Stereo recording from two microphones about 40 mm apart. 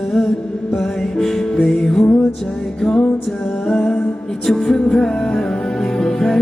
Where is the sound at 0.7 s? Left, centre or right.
Centre.